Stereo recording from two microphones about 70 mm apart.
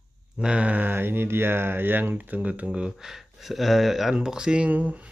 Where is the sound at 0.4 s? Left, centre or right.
Centre.